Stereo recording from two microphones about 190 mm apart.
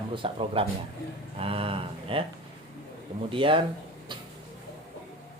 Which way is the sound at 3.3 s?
25° right (ahead or behind).